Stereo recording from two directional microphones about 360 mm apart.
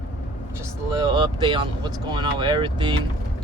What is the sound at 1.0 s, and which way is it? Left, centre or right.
Speech, centre.